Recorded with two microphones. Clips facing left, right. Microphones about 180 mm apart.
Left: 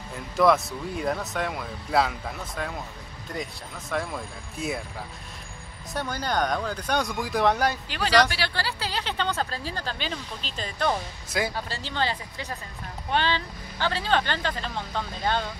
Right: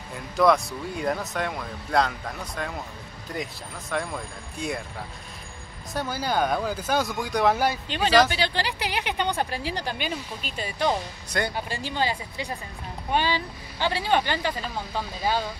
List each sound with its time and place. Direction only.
0.1 s speech: centre (ahead or behind)
5.9 s speech: 5° right (ahead or behind)
7.9 s speech: 20° right (ahead or behind)
11.2 s speech: 5° left (ahead or behind)
11.5 s speech: 15° right (ahead or behind)